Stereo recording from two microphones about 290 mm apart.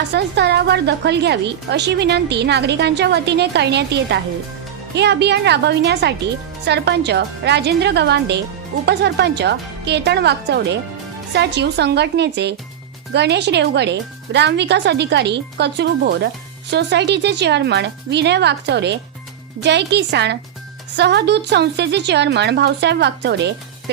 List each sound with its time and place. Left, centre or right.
0.1 s a woman's voice: right